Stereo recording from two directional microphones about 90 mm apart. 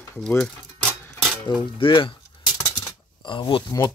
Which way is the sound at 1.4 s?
60° left (ahead or behind).